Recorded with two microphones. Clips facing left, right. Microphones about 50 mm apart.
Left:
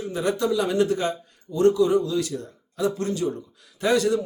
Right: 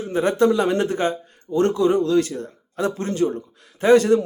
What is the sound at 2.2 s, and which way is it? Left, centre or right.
Speech, right.